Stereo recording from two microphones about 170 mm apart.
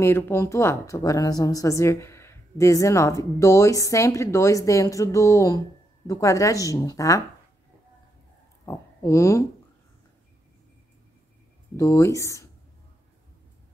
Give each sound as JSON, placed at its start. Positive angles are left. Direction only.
{"t": 0.0, "sound": "speech", "side_deg": 15}
{"t": 8.6, "sound": "speech", "side_deg": 15}
{"t": 11.7, "sound": "speech", "side_deg": 15}